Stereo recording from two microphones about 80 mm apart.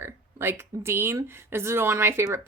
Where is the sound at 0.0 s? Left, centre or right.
Right.